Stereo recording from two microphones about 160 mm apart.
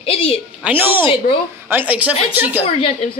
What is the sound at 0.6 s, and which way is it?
Speech, 10° right (ahead or behind).